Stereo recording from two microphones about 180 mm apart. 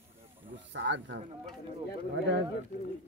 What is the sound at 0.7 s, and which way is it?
Speech, 90° right.